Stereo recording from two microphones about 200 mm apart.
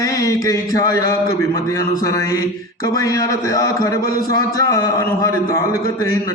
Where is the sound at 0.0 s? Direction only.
15° left (ahead or behind).